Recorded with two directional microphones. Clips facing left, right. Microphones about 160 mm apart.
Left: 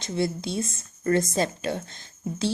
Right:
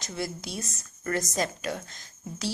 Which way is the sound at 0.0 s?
25° left (ahead or behind).